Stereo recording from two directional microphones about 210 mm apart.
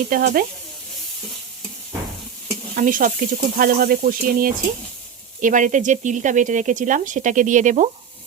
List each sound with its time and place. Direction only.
0.1 s speech: 45° right (ahead or behind)
2.7 s speech: 40° right (ahead or behind)